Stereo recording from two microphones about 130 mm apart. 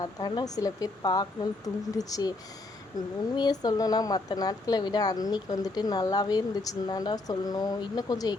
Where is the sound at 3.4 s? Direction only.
30° left (ahead or behind).